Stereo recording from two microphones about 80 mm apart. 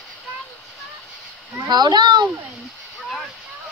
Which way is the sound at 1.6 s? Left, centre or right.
Right.